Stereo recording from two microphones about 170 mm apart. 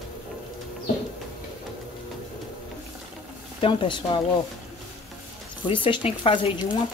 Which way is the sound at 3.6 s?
35° left (ahead or behind).